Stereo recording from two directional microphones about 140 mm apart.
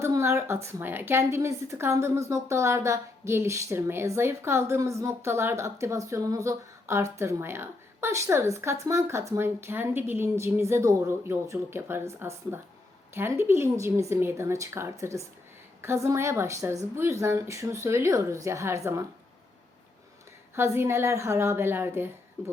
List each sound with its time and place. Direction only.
0.0 s a woman's voice: 20° right (ahead or behind)
20.6 s a woman's voice: 20° right (ahead or behind)